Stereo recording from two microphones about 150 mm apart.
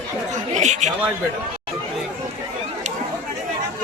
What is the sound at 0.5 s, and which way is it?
Speech, 50° right (ahead or behind).